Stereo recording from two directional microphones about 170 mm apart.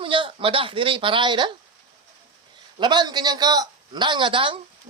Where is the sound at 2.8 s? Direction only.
25° right (ahead or behind).